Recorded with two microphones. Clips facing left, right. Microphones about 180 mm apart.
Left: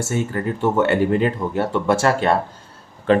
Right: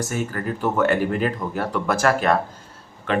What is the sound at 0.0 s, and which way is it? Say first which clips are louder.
Speech: left 3 dB; 25° left (ahead or behind).